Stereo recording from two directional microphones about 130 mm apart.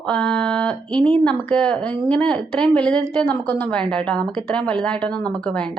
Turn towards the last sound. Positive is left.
turn(degrees=10)  # may be behind; listen again after turning